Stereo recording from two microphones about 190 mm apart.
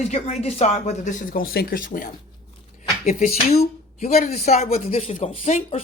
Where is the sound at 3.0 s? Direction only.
35° left (ahead or behind).